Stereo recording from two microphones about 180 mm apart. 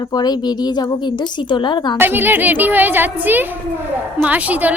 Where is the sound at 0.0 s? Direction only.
20° left (ahead or behind).